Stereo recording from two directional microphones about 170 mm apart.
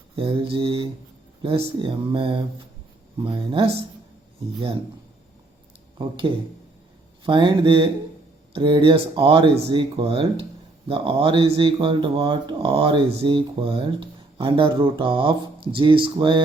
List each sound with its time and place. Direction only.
0.2 s speech: 30° right (ahead or behind)
6.0 s speech: 30° right (ahead or behind)